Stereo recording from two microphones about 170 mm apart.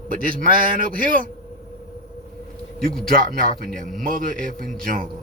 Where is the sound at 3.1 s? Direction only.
55° right (ahead or behind).